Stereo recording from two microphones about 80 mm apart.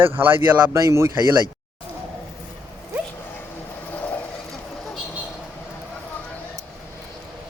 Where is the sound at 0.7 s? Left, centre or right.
Right.